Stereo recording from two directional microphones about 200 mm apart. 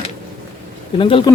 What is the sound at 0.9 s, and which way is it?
Speech, 25° left (ahead or behind).